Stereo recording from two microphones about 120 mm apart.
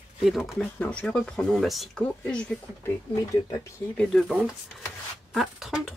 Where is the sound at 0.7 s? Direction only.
10° left (ahead or behind).